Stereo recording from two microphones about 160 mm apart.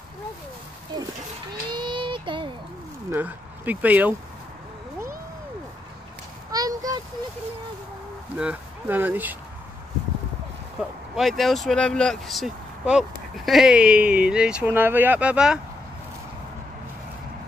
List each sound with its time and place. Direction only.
1.7 s child singing: 30° right (ahead or behind)
3.1 s speech: 10° right (ahead or behind)
6.5 s a sound: 25° right (ahead or behind)
8.4 s speech: 10° right (ahead or behind)
10.8 s speech: centre (ahead or behind)